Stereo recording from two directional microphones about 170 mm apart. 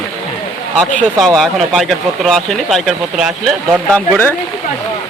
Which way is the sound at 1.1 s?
Centre (ahead or behind).